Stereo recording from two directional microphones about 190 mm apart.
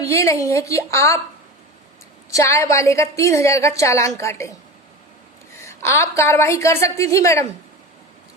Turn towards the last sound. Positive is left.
turn(degrees=15)  # may be behind; listen again after turning